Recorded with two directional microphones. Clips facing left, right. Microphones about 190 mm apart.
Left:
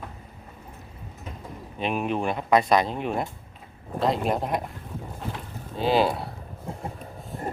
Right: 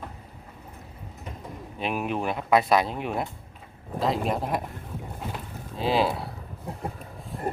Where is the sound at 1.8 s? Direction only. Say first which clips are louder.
Left 2 dB; 5° right (ahead or behind).